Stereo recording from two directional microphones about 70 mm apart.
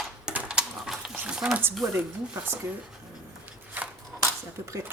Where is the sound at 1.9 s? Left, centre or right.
Right.